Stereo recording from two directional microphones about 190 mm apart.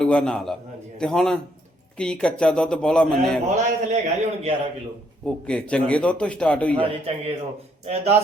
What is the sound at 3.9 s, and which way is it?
Speech, 35° right (ahead or behind).